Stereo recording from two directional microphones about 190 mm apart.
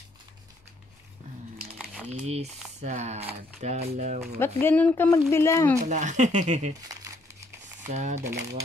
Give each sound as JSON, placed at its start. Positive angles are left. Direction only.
{"t": 2.0, "sound": "speech", "side_deg": -35}
{"t": 4.4, "sound": "speech", "side_deg": 10}
{"t": 5.9, "sound": "speech", "side_deg": -40}
{"t": 7.9, "sound": "speech", "side_deg": -40}